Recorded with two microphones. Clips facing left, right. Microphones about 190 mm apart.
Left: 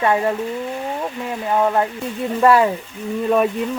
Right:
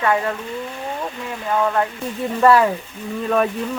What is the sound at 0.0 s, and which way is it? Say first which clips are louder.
Speech: left 2 dB; 25° left (ahead or behind).